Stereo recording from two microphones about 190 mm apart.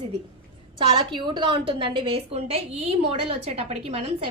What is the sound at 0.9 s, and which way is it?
A woman's voice, 25° right (ahead or behind).